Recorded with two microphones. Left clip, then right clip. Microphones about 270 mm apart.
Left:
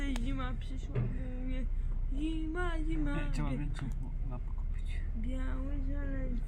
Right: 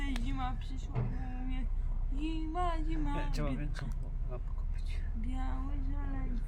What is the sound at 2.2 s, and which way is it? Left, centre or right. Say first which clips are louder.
Speech: right 1 dB; centre.